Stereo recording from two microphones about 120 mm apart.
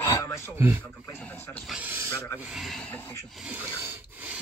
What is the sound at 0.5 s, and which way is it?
Speech, 20° right (ahead or behind).